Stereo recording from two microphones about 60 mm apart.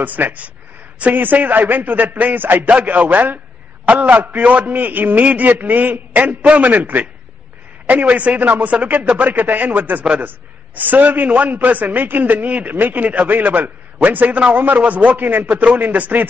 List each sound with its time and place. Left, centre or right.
0.0 s a man's voice: right